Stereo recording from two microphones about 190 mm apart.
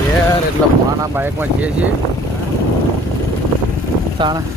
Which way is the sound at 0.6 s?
5° left (ahead or behind).